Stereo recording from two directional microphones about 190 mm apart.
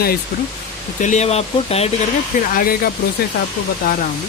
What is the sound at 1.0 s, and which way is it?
Speech, 40° left (ahead or behind).